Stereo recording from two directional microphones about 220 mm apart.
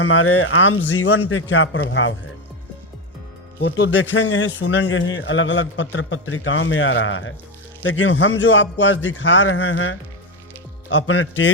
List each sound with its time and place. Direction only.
0.0 s a man's voice: 70° left (ahead or behind)
3.6 s a man's voice: 55° left (ahead or behind)